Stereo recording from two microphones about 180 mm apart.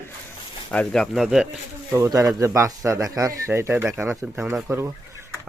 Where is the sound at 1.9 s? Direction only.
15° right (ahead or behind).